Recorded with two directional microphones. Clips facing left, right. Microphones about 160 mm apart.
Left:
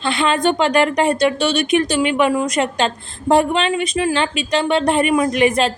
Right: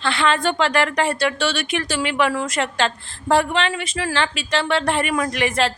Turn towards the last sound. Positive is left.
turn(degrees=20)  # may be behind; listen again after turning